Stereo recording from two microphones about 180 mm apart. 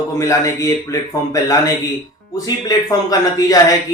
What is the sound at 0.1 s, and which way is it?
A man's voice, 15° left (ahead or behind).